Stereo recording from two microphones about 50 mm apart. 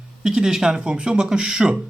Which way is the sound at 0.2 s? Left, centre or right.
Centre.